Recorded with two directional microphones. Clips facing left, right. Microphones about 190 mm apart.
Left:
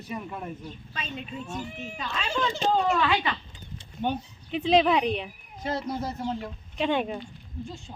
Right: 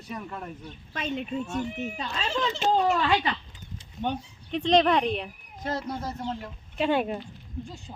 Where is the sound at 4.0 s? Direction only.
5° left (ahead or behind).